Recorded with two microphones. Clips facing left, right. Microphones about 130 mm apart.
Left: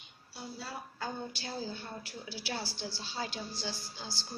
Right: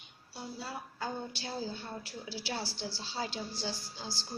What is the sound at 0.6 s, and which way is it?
A woman's voice, 15° right (ahead or behind).